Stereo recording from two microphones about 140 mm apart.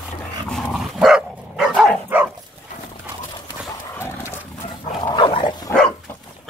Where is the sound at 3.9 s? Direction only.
15° left (ahead or behind).